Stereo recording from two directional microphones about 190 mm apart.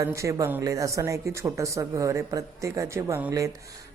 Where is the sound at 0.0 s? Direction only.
15° right (ahead or behind).